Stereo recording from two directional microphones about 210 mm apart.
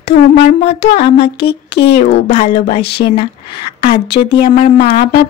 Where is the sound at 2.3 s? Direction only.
30° left (ahead or behind).